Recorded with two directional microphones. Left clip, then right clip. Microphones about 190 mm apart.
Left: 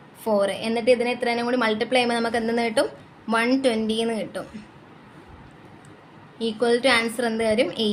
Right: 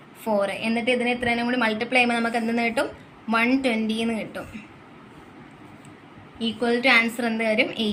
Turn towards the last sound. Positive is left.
turn(degrees=45)  # may be behind; listen again after turning